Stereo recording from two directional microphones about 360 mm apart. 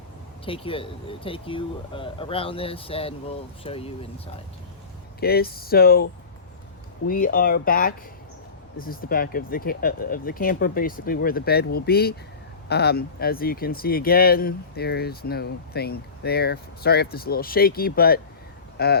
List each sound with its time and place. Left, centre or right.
0.4 s speech: centre
5.2 s speech: left
7.1 s speech: left